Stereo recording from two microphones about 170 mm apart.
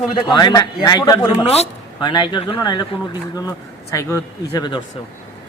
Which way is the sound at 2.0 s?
25° left (ahead or behind).